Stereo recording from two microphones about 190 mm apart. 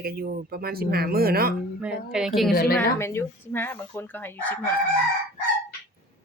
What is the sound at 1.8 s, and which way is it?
Speech, 5° right (ahead or behind).